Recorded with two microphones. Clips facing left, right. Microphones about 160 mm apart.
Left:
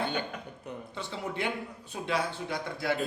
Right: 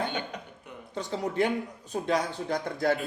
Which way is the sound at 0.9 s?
40° right (ahead or behind).